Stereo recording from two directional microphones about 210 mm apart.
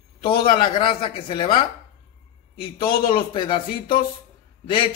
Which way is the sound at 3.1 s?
25° left (ahead or behind).